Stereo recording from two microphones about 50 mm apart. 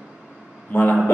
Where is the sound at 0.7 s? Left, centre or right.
Left.